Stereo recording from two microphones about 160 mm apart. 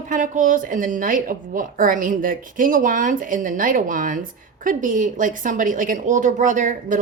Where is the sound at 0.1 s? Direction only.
55° right (ahead or behind).